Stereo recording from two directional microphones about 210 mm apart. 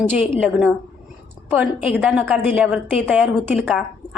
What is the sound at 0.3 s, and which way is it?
A woman's voice, 5° right (ahead or behind).